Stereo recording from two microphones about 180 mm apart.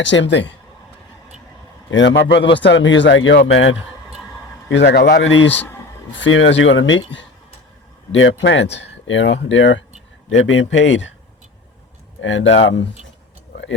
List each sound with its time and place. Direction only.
0.0 s speech: 90° left
1.9 s speech: 85° left
4.7 s a man's voice: 70° left (ahead or behind); by 11.1 s 90° left
12.2 s speech: 90° left